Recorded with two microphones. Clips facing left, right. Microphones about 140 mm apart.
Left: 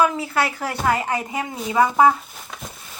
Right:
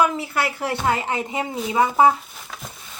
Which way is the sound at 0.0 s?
25° right (ahead or behind).